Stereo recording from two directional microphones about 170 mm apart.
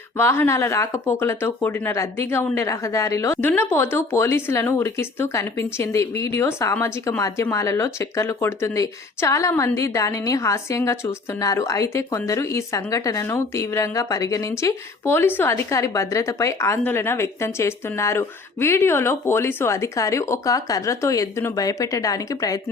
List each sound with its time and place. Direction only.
0.2 s speech: 15° left (ahead or behind)